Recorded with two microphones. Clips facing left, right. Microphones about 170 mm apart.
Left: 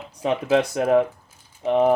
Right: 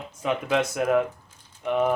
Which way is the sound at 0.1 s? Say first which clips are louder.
Left 4 dB; 35° left (ahead or behind).